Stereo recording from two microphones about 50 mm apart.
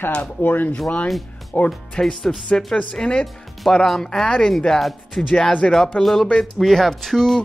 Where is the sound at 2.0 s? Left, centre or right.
Centre.